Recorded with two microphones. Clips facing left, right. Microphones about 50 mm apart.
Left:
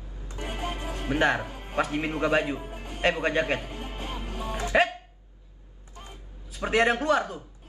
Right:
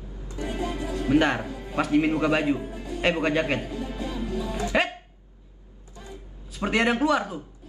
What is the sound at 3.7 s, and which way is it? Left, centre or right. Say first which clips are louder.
Music: right 5 dB; left.